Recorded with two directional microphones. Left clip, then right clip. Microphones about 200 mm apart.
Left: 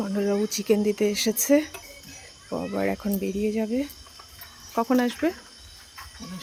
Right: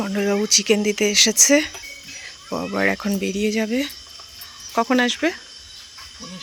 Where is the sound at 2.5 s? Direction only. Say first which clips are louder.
Right 4 dB; 20° right (ahead or behind).